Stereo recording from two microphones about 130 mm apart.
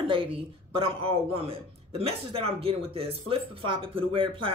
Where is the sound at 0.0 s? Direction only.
45° right (ahead or behind).